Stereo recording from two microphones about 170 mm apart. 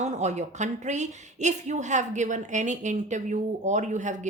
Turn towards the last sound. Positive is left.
turn(degrees=-45)  # may be behind; listen again after turning